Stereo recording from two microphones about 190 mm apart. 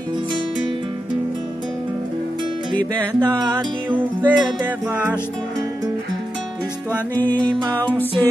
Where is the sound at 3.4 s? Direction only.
25° right (ahead or behind).